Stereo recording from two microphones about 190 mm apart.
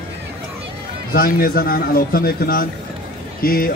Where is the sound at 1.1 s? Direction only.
50° left (ahead or behind).